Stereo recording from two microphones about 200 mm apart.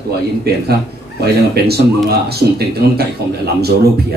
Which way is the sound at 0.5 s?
50° right (ahead or behind).